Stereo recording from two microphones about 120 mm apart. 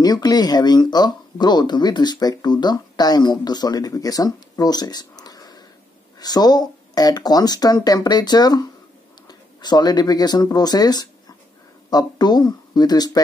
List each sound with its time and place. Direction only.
0.0 s speech: 35° left (ahead or behind)